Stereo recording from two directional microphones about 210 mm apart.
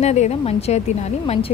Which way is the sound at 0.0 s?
30° left (ahead or behind).